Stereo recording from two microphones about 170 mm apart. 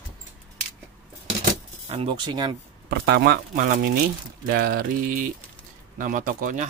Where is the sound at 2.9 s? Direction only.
65° right (ahead or behind).